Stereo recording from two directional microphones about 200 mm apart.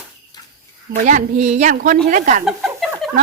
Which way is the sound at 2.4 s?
Centre (ahead or behind).